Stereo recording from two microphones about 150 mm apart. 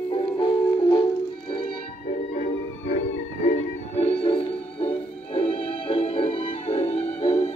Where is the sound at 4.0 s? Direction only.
40° left (ahead or behind).